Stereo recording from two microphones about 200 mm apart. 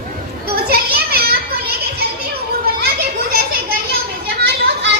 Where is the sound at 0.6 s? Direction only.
50° right (ahead or behind).